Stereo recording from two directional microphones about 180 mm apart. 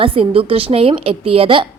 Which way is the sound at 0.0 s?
30° right (ahead or behind).